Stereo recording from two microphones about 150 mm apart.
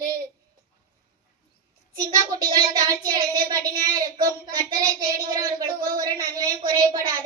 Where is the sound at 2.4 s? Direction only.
25° right (ahead or behind).